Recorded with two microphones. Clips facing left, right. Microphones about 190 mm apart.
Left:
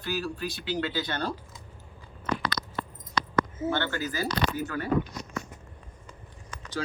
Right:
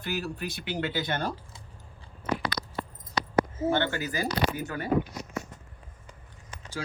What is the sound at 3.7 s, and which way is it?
Speech, 15° right (ahead or behind).